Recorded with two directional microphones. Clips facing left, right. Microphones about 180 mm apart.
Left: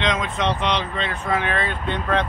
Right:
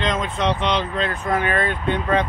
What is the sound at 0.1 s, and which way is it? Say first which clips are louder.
Speech: right 1 dB; centre (ahead or behind).